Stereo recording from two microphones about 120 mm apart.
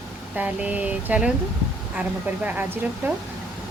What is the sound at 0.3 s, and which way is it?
Speech, 10° right (ahead or behind).